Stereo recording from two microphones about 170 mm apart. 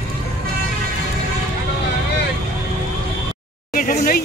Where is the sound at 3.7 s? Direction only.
55° left (ahead or behind).